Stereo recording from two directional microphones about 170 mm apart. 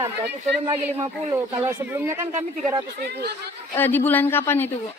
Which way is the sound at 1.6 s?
15° right (ahead or behind).